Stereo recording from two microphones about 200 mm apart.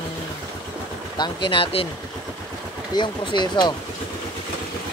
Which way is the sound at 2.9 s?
20° left (ahead or behind).